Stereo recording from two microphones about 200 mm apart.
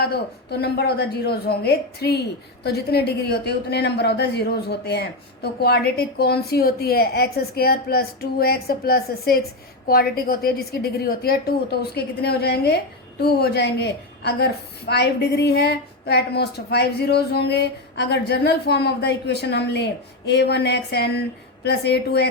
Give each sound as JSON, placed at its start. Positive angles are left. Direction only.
{"t": 0.0, "sound": "a woman's voice", "side_deg": 55}